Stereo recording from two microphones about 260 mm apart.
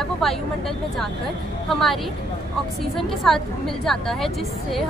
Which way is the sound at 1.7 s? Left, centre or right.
Centre.